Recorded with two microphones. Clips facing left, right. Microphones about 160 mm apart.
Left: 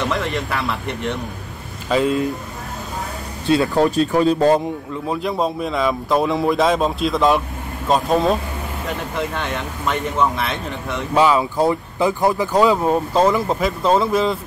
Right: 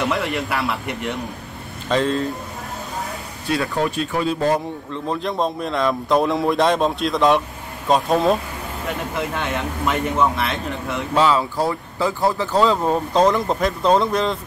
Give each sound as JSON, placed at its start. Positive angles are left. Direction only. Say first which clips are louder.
{"t": 0.1, "sound": "speech", "louder": "even", "side_deg": 0}
{"t": 1.9, "sound": "speech", "louder": "left 2 dB", "side_deg": 10}
{"t": 3.7, "sound": "speech", "louder": "left 6 dB", "side_deg": 40}
{"t": 5.0, "sound": "speech", "louder": "left 1 dB", "side_deg": 5}
{"t": 11.1, "sound": "speech", "louder": "left 2 dB", "side_deg": 15}